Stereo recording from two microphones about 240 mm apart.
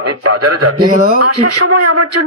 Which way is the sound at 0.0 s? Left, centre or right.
Right.